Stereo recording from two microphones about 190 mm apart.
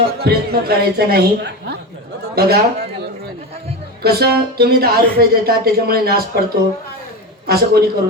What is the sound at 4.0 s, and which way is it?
A man's voice, 55° right (ahead or behind).